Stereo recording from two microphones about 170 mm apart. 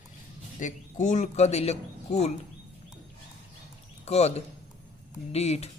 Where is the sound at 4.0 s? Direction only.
40° left (ahead or behind).